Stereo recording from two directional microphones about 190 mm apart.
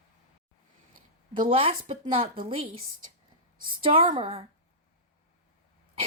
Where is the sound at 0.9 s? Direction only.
45° right (ahead or behind).